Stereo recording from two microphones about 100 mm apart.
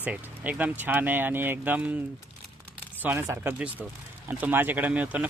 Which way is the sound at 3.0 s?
25° right (ahead or behind).